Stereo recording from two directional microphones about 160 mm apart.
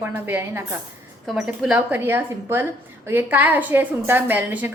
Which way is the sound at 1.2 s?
Centre (ahead or behind).